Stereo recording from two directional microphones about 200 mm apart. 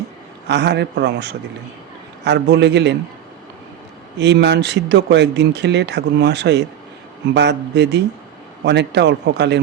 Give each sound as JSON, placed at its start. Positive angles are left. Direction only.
{"t": 0.4, "sound": "speech", "side_deg": -60}
{"t": 4.2, "sound": "speech", "side_deg": -60}